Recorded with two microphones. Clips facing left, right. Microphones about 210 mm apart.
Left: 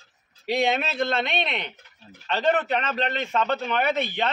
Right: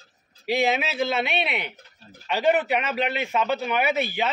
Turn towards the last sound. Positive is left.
turn(degrees=-5)  # may be behind; listen again after turning